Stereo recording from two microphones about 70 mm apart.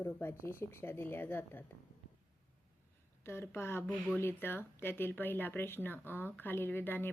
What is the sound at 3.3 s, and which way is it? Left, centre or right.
Speech, left.